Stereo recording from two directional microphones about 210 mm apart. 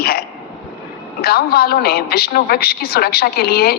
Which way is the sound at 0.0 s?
50° left (ahead or behind).